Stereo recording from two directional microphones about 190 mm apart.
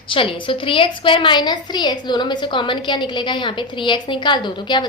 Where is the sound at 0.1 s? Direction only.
25° left (ahead or behind).